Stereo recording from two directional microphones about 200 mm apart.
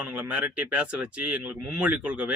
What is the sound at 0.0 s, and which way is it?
Speech, 5° right (ahead or behind).